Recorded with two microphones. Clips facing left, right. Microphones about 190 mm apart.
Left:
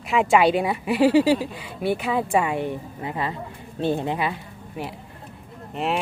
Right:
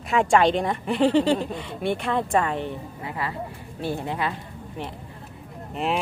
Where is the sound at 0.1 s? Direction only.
Centre (ahead or behind).